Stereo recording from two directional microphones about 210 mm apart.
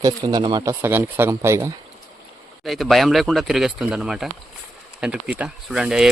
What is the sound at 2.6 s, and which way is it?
Speech, centre (ahead or behind).